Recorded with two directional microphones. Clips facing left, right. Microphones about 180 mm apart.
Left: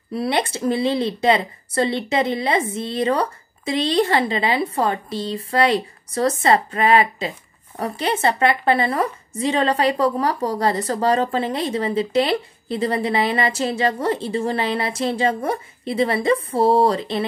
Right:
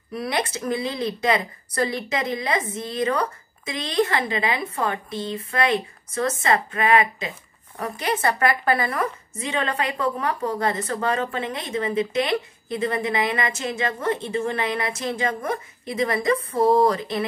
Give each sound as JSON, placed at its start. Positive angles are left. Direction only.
{"t": 0.1, "sound": "a woman's voice", "side_deg": 30}